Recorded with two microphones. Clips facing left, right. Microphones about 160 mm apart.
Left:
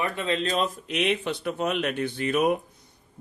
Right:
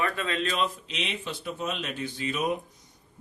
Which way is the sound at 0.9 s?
55° left (ahead or behind).